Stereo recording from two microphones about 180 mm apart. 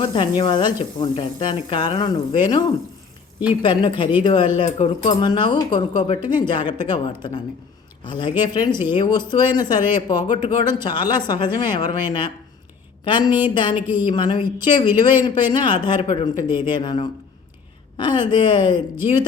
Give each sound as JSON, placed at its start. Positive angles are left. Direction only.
{"t": 0.0, "sound": "speech", "side_deg": 30}